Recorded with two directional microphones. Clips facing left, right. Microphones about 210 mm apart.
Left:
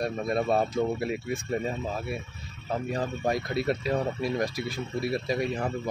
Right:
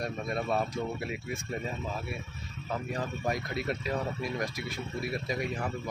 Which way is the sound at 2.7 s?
30° left (ahead or behind).